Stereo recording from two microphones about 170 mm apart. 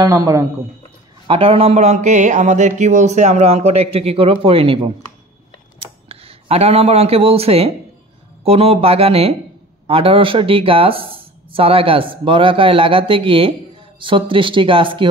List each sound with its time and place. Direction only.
0.0 s a man's voice: 20° right (ahead or behind)
1.2 s speech: 30° right (ahead or behind)
6.0 s a man's voice: 35° right (ahead or behind)